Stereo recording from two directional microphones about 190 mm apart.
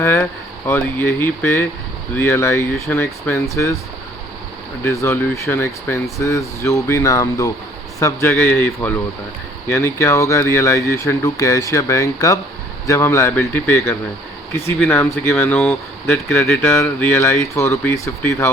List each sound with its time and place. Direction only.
0.0 s speech: 15° left (ahead or behind)
4.8 s speech: 15° left (ahead or behind)